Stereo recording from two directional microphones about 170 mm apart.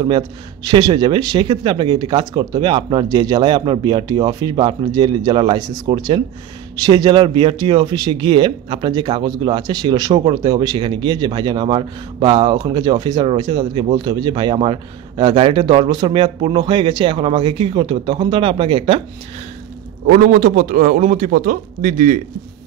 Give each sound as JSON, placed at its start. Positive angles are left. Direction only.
{"t": 0.7, "sound": "speech", "side_deg": -25}
{"t": 20.2, "sound": "a man's voice", "side_deg": -50}